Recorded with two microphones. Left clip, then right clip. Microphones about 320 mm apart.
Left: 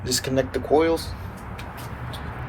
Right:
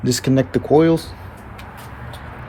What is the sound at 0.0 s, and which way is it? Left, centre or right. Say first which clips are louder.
Speech: right 5 dB; right.